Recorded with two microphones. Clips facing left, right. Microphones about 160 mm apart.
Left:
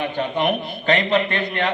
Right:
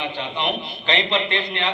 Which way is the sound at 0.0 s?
50° left (ahead or behind).